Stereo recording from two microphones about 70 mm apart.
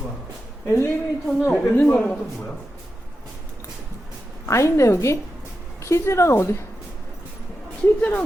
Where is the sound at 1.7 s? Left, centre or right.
Left.